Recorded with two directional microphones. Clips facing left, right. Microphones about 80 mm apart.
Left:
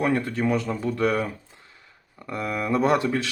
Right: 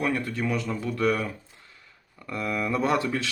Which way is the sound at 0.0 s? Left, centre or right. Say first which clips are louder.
Left 4 dB; left.